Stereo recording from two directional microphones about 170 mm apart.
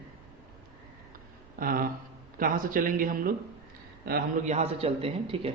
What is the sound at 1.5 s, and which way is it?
Speech, 55° right (ahead or behind).